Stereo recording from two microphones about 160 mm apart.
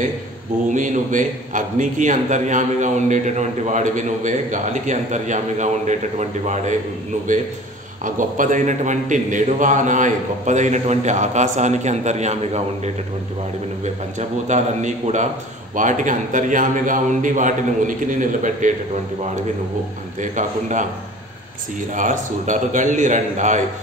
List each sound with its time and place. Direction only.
0.7 s a man's voice: 55° right (ahead or behind)
8.0 s a man's voice: 55° right (ahead or behind)
14.5 s a man's voice: 50° right (ahead or behind)
20.2 s a man's voice: 50° right (ahead or behind)
21.9 s a man's voice: 55° right (ahead or behind)